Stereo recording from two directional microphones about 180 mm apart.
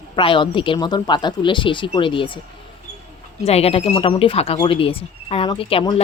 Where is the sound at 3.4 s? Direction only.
35° left (ahead or behind).